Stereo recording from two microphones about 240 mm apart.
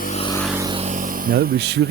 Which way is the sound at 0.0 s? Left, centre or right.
Left.